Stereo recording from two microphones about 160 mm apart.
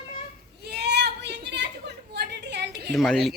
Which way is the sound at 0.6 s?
90° right.